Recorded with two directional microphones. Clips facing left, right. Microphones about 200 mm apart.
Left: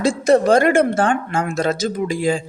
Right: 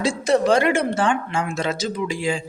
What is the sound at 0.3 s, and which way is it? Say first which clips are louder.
Speech: left 4 dB; 50° left (ahead or behind).